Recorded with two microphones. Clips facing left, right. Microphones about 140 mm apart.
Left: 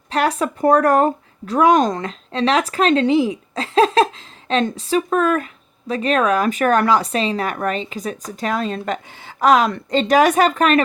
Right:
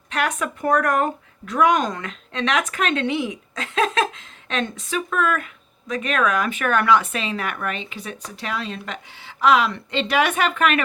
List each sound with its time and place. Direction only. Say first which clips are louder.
0.1 s speech: left 5 dB; 35° left (ahead or behind)